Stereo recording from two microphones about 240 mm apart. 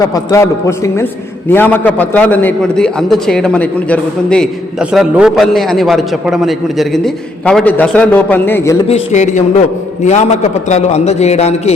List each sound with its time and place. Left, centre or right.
0.1 s a man's voice: centre
8.9 s a man's voice: left